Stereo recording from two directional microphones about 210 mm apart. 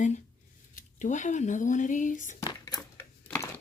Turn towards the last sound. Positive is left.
turn(degrees=10)  # may be behind; listen again after turning